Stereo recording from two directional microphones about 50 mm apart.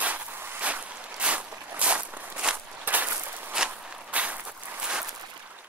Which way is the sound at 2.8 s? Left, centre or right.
Right.